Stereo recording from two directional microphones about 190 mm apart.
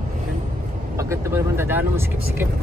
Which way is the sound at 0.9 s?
15° right (ahead or behind).